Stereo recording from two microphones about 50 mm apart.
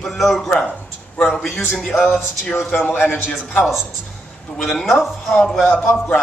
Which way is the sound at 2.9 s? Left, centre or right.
Left.